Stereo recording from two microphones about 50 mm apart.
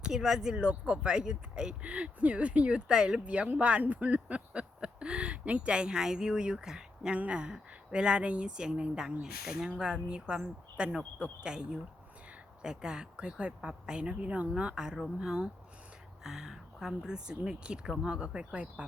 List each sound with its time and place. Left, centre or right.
0.0 s speech: centre